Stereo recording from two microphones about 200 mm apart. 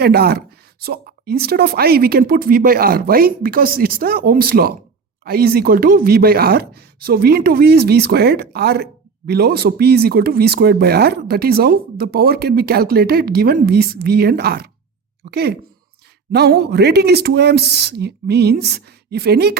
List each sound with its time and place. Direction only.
0.0 s speech: 50° right (ahead or behind)